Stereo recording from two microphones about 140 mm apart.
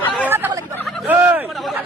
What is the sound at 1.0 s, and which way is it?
Speech, 10° right (ahead or behind).